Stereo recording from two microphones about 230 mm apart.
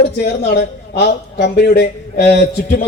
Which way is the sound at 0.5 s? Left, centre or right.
Left.